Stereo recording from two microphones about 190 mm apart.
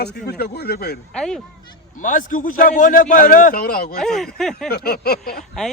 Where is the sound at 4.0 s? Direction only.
Centre (ahead or behind).